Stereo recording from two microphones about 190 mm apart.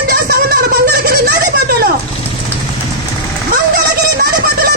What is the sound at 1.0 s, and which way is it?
Giggle, 55° right (ahead or behind).